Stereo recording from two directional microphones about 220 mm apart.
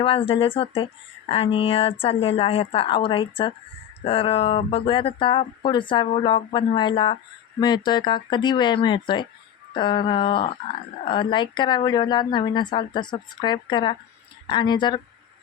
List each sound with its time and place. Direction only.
0.0 s speech: 25° left (ahead or behind)